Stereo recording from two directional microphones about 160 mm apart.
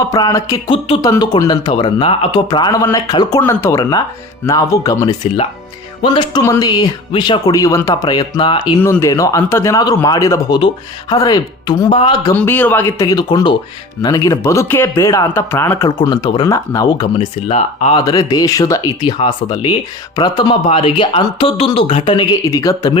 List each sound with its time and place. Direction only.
0.0 s speech: 20° left (ahead or behind)
8.8 s speech: 15° left (ahead or behind)
12.3 s speech: 10° left (ahead or behind)
16.0 s speech: 30° left (ahead or behind)
17.2 s speech: 40° left (ahead or behind)
17.9 s speech: 20° left (ahead or behind)